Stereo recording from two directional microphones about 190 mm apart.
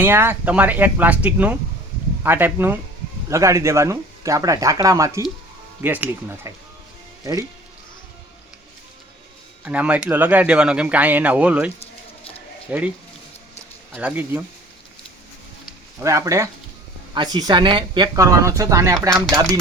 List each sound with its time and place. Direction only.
0.0 s speech: 10° right (ahead or behind)
9.6 s speech: 5° right (ahead or behind)
11.8 s a sound: 30° left (ahead or behind)
12.7 s speech: 10° right (ahead or behind)
13.9 s speech: 10° right (ahead or behind)
16.0 s speech: 15° right (ahead or behind)